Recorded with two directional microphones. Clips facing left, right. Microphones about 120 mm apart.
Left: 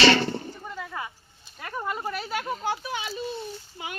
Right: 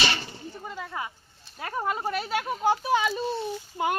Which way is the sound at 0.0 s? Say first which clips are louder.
Left 10 dB; 80° left.